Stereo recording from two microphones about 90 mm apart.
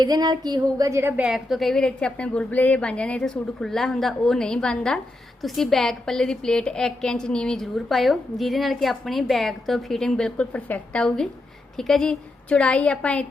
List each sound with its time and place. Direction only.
0.0 s a woman's voice: 50° right (ahead or behind)
1.1 s a woman's voice: 15° right (ahead or behind)
1.5 s a woman's voice: centre (ahead or behind)